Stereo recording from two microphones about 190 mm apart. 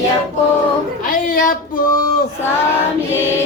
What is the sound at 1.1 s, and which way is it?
Speech, 45° left (ahead or behind).